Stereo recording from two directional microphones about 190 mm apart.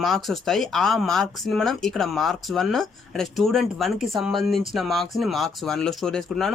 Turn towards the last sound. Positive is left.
turn(degrees=0)  # may be behind; listen again after turning